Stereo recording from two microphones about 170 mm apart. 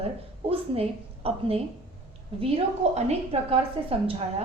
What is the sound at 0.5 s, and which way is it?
A woman's voice, 35° right (ahead or behind).